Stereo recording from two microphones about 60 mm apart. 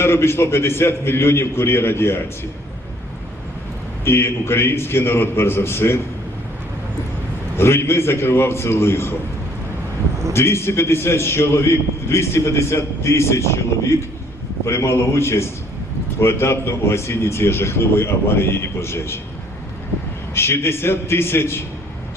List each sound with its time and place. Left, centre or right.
0.0 s a man's voice: left
4.0 s a man's voice: left
7.5 s a man's voice: left
10.3 s a man's voice: left
20.3 s a man's voice: left